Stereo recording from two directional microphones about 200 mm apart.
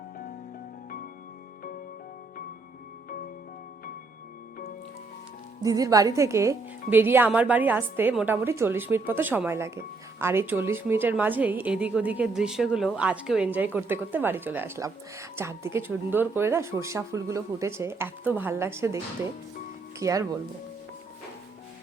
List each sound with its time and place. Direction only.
5.6 s a woman's voice: 15° right (ahead or behind)
20.0 s a woman's voice: 15° right (ahead or behind)